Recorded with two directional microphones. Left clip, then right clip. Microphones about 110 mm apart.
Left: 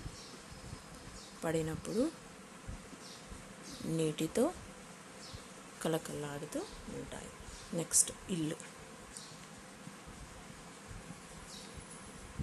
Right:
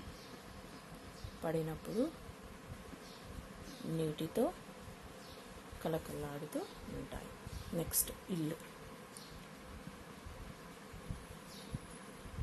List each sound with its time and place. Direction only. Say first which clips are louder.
1.4 s speech: left 3 dB; 30° left (ahead or behind)
3.9 s speech: left 4 dB; 30° left (ahead or behind)
5.8 s speech: left 3 dB; 30° left (ahead or behind)
7.7 s speech: left 5 dB; 15° left (ahead or behind)